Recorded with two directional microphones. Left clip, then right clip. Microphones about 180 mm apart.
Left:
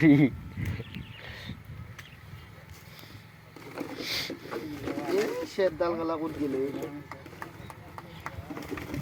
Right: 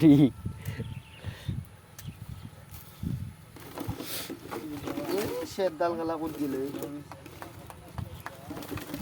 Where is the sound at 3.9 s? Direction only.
20° right (ahead or behind).